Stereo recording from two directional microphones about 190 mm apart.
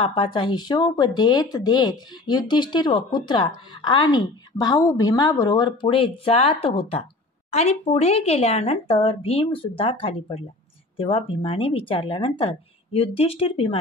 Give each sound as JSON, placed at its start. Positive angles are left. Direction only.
{"t": 0.0, "sound": "speech", "side_deg": 25}